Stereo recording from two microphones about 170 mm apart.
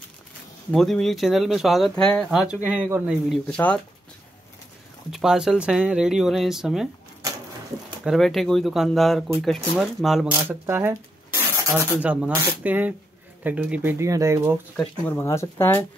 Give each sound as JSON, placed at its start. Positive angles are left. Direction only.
{"t": 0.7, "sound": "speech", "side_deg": 5}
{"t": 3.5, "sound": "speech", "side_deg": 5}
{"t": 5.1, "sound": "speech", "side_deg": -5}
{"t": 8.0, "sound": "speech", "side_deg": 0}
{"t": 10.7, "sound": "speech", "side_deg": -15}
{"t": 14.8, "sound": "speech", "side_deg": 10}